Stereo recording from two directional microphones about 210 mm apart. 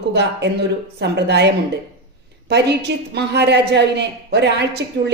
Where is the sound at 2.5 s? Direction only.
55° right (ahead or behind).